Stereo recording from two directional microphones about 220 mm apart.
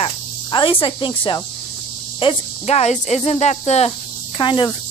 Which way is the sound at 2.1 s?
25° left (ahead or behind).